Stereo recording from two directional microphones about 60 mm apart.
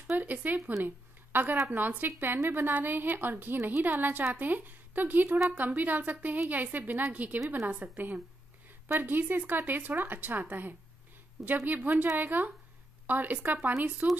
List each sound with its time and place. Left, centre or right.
0.2 s a woman's voice: right
0.8 s a sound: right
1.7 s a woman's voice: right